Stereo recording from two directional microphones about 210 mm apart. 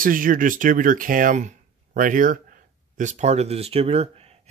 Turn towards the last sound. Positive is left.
turn(degrees=-30)  # may be behind; listen again after turning